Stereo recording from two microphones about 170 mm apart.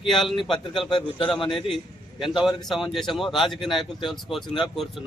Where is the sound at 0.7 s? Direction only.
30° left (ahead or behind).